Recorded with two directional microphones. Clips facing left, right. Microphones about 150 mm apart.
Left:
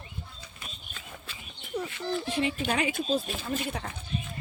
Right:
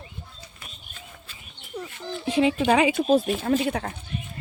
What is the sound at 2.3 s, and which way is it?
Speech, 90° right.